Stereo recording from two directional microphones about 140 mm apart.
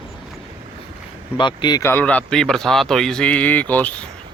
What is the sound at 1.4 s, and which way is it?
Speech, 35° left (ahead or behind).